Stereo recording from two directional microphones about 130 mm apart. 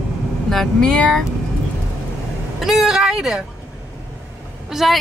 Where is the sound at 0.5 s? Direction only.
5° left (ahead or behind).